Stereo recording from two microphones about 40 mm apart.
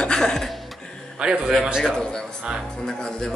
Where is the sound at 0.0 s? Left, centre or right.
Centre.